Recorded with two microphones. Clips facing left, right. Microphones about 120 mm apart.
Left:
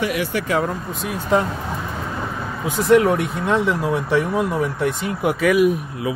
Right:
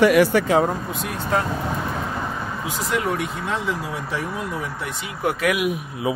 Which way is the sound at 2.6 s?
60° left (ahead or behind).